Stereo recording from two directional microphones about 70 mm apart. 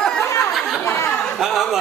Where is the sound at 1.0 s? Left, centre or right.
Left.